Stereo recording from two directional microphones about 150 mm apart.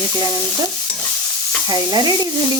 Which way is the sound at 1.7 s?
30° right (ahead or behind).